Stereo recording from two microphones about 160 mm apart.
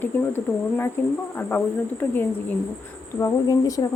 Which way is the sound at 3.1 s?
20° left (ahead or behind).